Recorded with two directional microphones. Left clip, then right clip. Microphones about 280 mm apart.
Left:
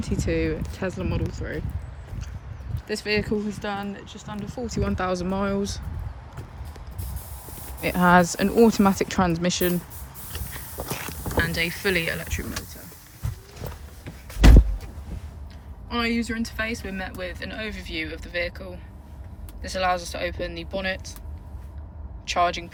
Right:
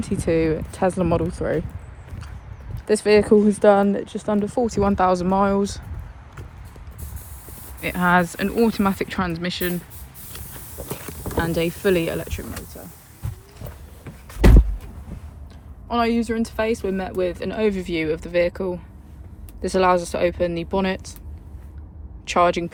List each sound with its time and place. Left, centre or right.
0.0 s speech: centre
2.8 s speech: centre
7.8 s speech: centre
10.8 s clip-clop: centre
11.3 s speech: centre
15.9 s speech: centre
19.6 s speech: right
22.3 s speech: right